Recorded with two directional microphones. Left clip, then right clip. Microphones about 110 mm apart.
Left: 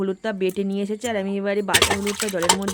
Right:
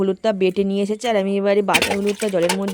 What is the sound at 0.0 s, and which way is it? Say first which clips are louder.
Speech: right 6 dB; 35° right (ahead or behind).